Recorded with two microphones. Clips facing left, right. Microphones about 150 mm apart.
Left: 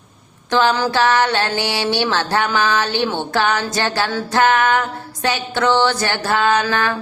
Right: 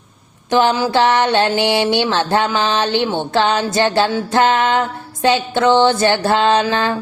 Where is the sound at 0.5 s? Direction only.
15° right (ahead or behind).